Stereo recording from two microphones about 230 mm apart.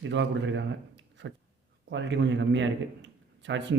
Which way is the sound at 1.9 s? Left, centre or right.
Right.